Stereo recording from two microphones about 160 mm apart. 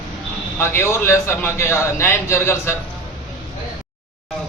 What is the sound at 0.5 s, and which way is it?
A man's voice, 15° left (ahead or behind).